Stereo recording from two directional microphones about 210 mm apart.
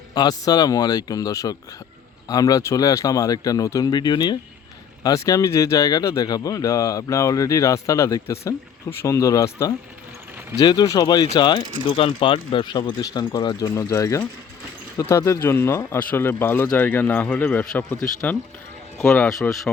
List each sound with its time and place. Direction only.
0.1 s speech: 20° left (ahead or behind); by 19.7 s centre (ahead or behind)